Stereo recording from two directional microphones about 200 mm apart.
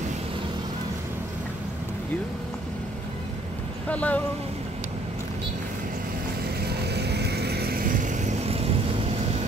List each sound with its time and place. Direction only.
3.9 s speech: 5° left (ahead or behind)
6.7 s vehicle: 55° right (ahead or behind); by 8.7 s 30° right (ahead or behind)